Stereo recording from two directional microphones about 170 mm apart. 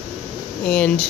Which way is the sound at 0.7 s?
5° left (ahead or behind).